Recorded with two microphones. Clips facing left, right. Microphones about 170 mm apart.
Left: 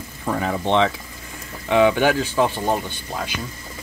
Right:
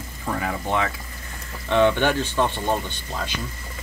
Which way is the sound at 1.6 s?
10° left (ahead or behind).